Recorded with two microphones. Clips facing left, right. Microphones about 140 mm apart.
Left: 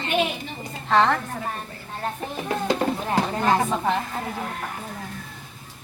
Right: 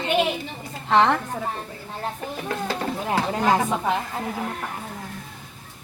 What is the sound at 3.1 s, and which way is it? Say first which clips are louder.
Speech: right 2 dB; 10° right (ahead or behind).